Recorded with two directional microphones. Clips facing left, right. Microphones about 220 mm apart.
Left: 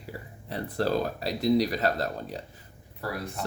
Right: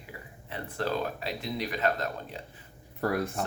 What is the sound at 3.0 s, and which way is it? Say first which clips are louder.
Speech: right 6 dB; 50° right (ahead or behind).